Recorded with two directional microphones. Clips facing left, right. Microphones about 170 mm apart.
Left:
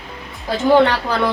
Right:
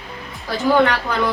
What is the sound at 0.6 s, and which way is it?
Speech, 30° left (ahead or behind).